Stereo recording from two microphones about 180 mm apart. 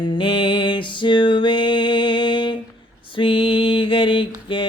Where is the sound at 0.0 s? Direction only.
30° left (ahead or behind).